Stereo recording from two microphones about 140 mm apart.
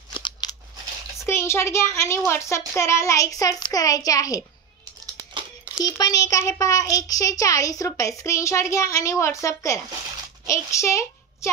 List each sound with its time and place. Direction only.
0.1 s scissors: 30° left (ahead or behind)
1.2 s a child's voice: 20° left (ahead or behind)
5.9 s a child's voice: 25° left (ahead or behind)